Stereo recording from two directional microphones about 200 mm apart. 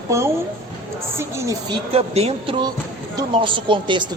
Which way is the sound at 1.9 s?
30° right (ahead or behind).